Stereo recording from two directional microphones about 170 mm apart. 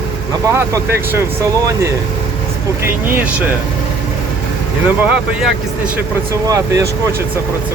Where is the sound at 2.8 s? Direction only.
10° right (ahead or behind).